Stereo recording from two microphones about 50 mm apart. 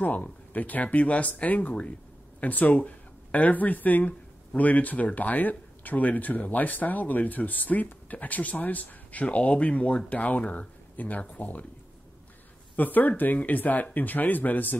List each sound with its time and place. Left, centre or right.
0.0 s speech: left
12.7 s speech: left